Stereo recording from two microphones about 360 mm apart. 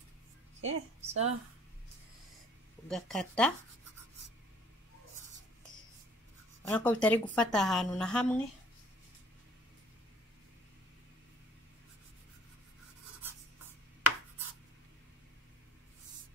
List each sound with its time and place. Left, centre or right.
0.6 s a woman's voice: right
2.9 s speech: centre
6.7 s speech: centre